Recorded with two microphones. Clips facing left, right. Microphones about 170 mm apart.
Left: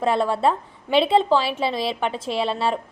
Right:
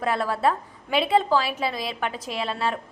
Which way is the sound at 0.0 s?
25° left (ahead or behind).